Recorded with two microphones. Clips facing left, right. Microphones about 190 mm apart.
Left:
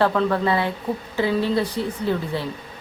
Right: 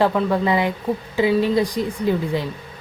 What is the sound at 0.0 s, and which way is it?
Speech, 15° right (ahead or behind).